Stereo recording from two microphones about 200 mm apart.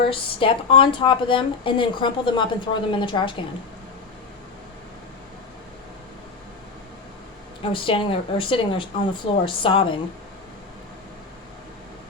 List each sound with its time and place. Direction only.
0.0 s speech: 25° left (ahead or behind)
7.6 s speech: 25° left (ahead or behind)